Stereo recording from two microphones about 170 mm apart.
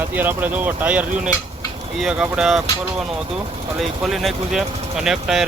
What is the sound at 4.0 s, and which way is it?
Speech, centre (ahead or behind).